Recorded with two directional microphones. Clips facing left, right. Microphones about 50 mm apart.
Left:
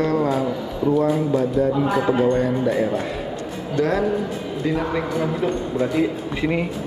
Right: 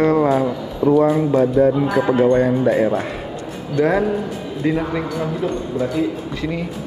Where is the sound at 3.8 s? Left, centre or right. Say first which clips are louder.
Right 4 dB; centre.